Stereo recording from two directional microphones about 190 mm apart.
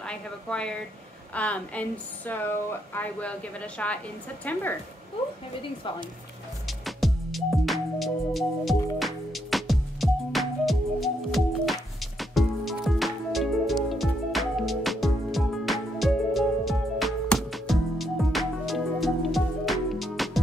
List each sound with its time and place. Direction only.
0.0 s a woman's voice: 5° left (ahead or behind)
6.8 s music: centre (ahead or behind)